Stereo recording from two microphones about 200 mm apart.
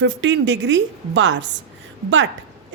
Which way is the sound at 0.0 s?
65° right (ahead or behind).